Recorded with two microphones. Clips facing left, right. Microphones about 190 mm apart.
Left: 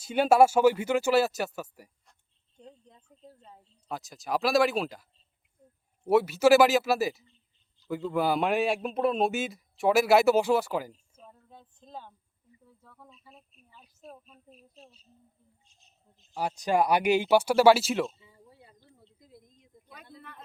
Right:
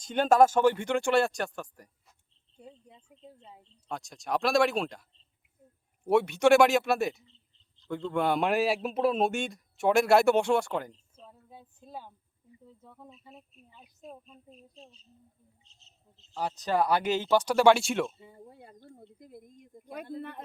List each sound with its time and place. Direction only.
0.0 s speech: 10° left (ahead or behind)
2.6 s speech: 10° right (ahead or behind)
3.6 s a man's voice: 5° left (ahead or behind)
11.3 s a sound: 10° right (ahead or behind)
12.6 s speech: 20° right (ahead or behind)
14.1 s speech: 5° left (ahead or behind)
18.2 s a sound: 55° right (ahead or behind)